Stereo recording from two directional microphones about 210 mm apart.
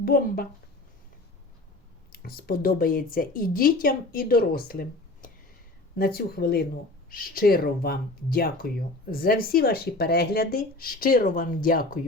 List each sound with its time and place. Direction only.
0.0 s speech: 45° left (ahead or behind)
2.1 s speech: 45° left (ahead or behind)